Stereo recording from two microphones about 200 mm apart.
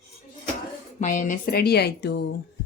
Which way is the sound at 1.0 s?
40° left (ahead or behind).